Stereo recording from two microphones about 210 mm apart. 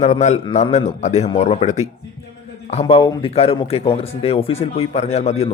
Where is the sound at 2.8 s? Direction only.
20° left (ahead or behind).